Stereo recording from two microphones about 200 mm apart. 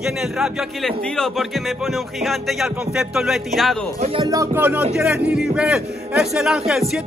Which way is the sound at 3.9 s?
30° right (ahead or behind).